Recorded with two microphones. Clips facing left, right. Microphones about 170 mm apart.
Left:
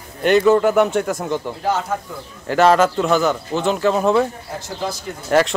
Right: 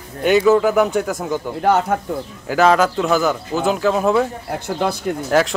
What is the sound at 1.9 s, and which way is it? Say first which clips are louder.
Speech: right 4 dB; 60° right (ahead or behind).